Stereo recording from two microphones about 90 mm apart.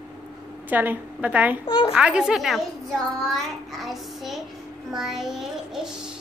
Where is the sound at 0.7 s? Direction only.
20° right (ahead or behind); by 2.6 s centre (ahead or behind).